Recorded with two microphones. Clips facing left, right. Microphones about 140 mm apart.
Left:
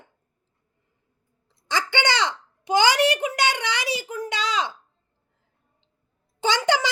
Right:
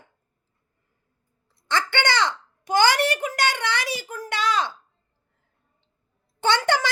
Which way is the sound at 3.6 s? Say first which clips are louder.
Right 1 dB; 50° right (ahead or behind).